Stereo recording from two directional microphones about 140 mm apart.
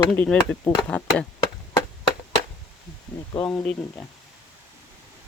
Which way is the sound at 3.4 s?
10° left (ahead or behind).